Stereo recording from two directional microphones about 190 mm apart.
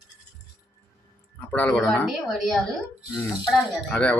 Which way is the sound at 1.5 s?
5° left (ahead or behind).